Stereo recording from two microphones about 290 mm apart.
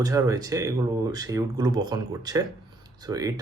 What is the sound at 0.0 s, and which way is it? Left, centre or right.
Speech, centre.